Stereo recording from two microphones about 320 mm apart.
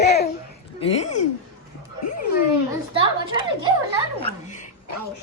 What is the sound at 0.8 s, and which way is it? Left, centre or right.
Speech, centre.